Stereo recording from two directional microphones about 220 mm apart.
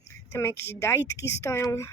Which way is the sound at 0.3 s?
10° left (ahead or behind).